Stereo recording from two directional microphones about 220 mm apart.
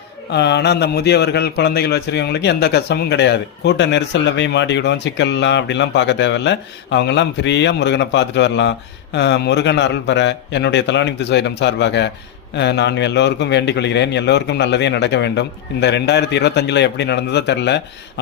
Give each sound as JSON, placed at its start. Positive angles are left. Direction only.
{"t": 0.3, "sound": "speech", "side_deg": 50}